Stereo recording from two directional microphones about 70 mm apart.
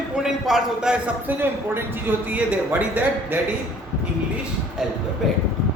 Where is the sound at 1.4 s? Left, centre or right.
Right.